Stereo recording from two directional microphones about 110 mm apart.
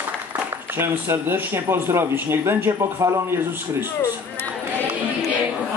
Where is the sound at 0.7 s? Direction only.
20° right (ahead or behind).